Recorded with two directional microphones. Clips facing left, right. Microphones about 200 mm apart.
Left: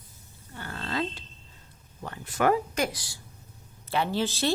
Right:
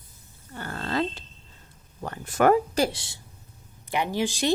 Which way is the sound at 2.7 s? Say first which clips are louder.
Right 4 dB; 30° right (ahead or behind).